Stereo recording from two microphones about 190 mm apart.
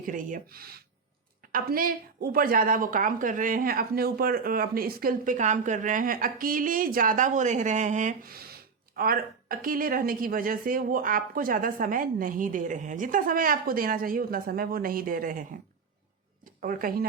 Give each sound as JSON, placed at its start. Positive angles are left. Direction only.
{"t": 0.0, "sound": "a woman's voice", "side_deg": -45}
{"t": 16.6, "sound": "a woman's voice", "side_deg": -50}